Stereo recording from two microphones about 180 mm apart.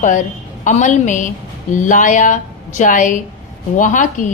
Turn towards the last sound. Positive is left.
turn(degrees=45)  # may be behind; listen again after turning